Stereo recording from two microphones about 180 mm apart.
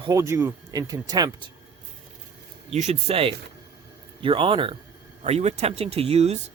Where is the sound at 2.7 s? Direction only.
35° right (ahead or behind).